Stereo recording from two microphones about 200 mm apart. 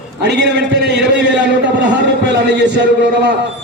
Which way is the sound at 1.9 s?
60° right (ahead or behind).